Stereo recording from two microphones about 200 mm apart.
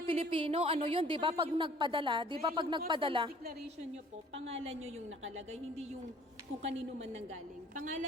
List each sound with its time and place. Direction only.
0.1 s a woman's voice: 25° right (ahead or behind)
4.4 s a woman's voice: 30° right (ahead or behind)